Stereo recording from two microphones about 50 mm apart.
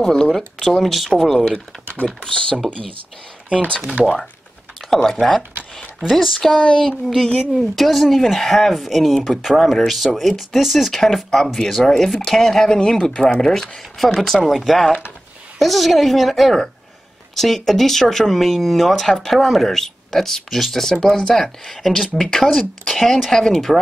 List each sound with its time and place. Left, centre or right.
0.0 s speech: centre
2.0 s speech: centre
4.8 s speech: centre
6.5 s speech: centre
7.5 s speech: centre